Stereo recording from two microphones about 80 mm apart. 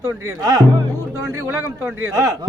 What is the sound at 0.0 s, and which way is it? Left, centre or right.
Speech, right.